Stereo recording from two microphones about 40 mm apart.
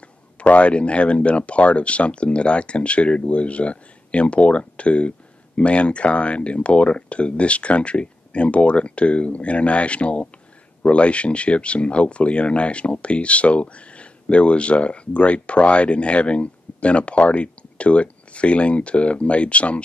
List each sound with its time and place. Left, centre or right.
0.4 s speech: left